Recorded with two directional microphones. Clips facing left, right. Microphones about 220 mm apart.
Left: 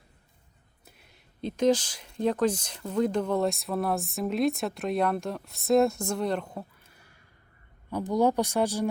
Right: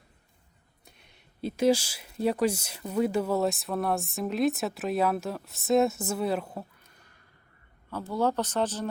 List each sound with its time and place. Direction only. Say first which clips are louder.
0.9 s speech: left 1 dB; centre (ahead or behind)
7.9 s speech: left 4 dB; 15° left (ahead or behind)